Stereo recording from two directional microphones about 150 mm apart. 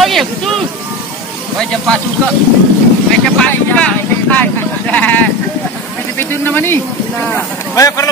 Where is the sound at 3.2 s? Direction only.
5° left (ahead or behind).